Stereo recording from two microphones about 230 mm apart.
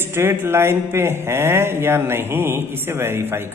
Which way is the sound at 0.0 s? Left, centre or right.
Centre.